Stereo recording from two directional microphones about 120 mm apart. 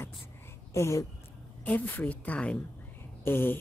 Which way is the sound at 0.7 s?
25° left (ahead or behind).